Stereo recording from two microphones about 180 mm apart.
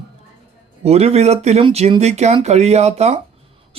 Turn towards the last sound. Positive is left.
turn(degrees=-40)  # may be behind; listen again after turning